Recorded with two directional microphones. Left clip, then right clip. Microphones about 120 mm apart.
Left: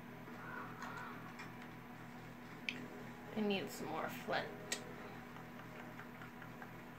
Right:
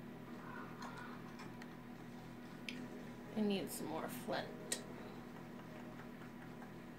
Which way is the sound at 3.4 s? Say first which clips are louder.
Left 1 dB; 40° right (ahead or behind).